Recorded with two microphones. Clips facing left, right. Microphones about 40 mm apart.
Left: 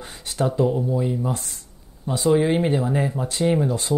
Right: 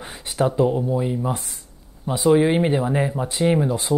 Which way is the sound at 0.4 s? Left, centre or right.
Centre.